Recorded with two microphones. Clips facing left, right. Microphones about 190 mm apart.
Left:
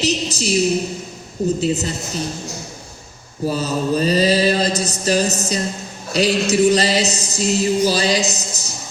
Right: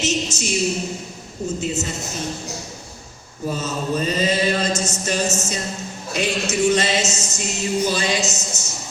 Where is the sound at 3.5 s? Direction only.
35° left (ahead or behind).